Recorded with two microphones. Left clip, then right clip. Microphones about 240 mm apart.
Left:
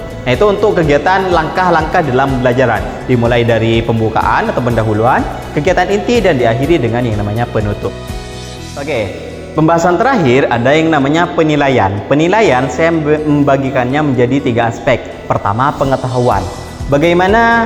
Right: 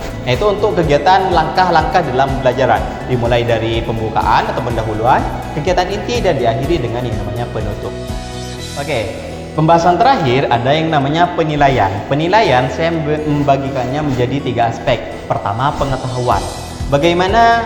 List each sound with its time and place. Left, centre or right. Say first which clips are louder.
0.3 s speech: left 4 dB; left
5.6 s speech: left 4 dB; left
9.6 s speech: even; left
16.9 s speech: left 3 dB; left